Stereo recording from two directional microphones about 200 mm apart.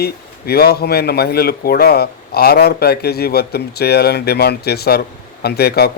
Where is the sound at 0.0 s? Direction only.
50° left (ahead or behind).